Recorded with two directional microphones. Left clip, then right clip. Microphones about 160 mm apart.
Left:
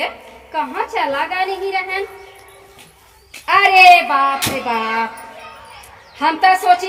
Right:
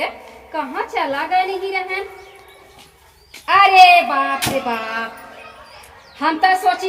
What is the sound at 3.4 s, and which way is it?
Speech, 30° left (ahead or behind).